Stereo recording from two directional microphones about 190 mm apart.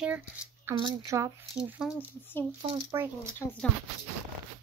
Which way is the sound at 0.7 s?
20° right (ahead or behind).